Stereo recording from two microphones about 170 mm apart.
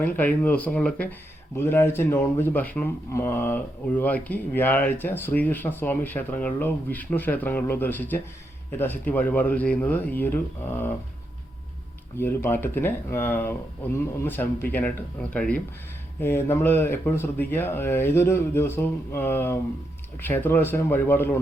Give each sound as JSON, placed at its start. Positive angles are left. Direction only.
{"t": 0.0, "sound": "speech", "side_deg": 10}
{"t": 12.1, "sound": "speech", "side_deg": 15}